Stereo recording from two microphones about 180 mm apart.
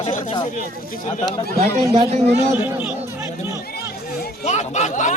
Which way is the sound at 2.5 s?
10° right (ahead or behind).